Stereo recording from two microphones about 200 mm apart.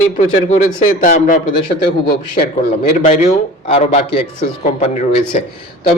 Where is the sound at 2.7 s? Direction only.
30° left (ahead or behind).